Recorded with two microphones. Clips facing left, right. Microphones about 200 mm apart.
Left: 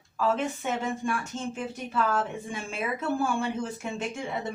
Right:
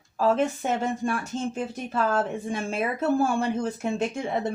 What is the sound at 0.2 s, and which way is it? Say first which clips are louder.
Speech: right 5 dB; 40° right (ahead or behind).